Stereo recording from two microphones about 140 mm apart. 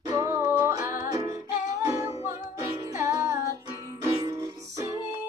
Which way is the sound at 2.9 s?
20° right (ahead or behind).